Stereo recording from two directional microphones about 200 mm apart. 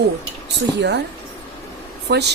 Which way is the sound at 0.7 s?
60° right (ahead or behind).